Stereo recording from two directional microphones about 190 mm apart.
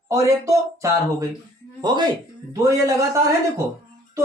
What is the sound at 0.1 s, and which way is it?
Speech, 15° right (ahead or behind).